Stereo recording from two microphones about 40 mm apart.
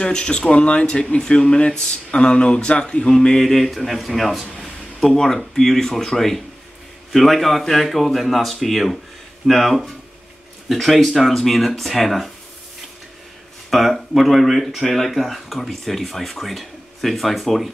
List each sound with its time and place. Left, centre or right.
0.0 s speech: left; by 12.3 s centre
13.7 s speech: centre